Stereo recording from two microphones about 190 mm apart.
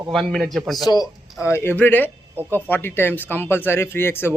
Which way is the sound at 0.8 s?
20° left (ahead or behind).